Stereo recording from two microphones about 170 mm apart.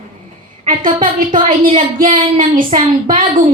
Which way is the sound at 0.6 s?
50° right (ahead or behind).